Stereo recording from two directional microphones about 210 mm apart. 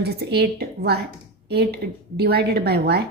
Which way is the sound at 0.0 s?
50° right (ahead or behind).